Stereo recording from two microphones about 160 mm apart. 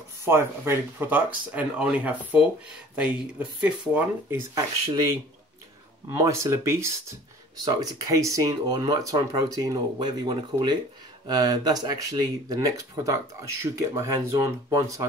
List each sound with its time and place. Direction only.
0.2 s speech: 15° right (ahead or behind)